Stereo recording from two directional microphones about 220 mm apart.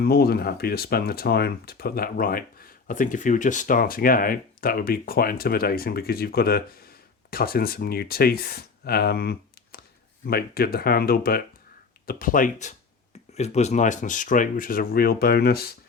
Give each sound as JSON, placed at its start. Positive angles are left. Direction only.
{"t": 0.0, "sound": "speech", "side_deg": 45}